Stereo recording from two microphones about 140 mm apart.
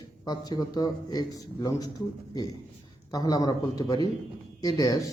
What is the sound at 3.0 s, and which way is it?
Speech, 25° left (ahead or behind).